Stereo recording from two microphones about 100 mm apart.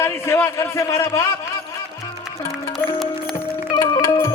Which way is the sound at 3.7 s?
40° left (ahead or behind).